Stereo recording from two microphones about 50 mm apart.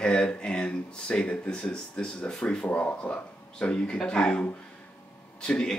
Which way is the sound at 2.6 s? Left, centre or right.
Left.